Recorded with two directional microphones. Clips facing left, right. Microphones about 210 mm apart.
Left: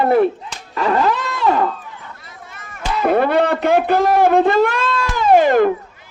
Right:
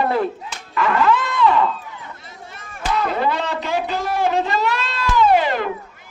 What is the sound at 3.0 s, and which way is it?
A man's voice, 55° left (ahead or behind).